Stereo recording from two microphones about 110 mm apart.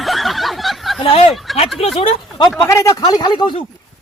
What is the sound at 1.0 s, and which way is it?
Speech, 65° left (ahead or behind).